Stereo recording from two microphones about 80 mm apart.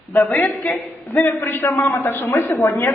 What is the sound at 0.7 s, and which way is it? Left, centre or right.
A man's voice, left.